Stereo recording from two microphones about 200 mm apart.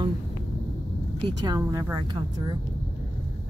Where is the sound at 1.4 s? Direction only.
15° right (ahead or behind).